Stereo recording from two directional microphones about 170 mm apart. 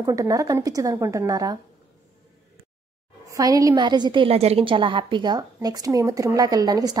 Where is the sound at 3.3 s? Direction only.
20° right (ahead or behind).